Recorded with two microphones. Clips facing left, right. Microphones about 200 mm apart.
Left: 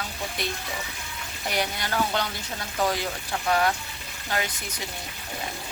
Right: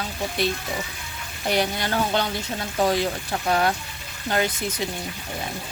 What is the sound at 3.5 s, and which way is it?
Speech, 30° right (ahead or behind).